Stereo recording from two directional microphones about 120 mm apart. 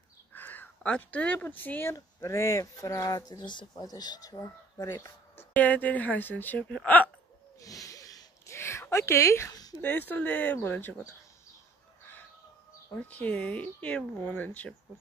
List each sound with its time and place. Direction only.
0.3 s speech: 15° left (ahead or behind); by 5.0 s 30° left (ahead or behind)
5.4 s speech: 15° left (ahead or behind)
7.6 s a sound: 30° left (ahead or behind)
9.8 s speech: 15° left (ahead or behind)
12.9 s speech: 10° left (ahead or behind)